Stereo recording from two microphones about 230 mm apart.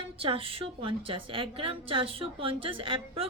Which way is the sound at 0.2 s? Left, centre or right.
Right.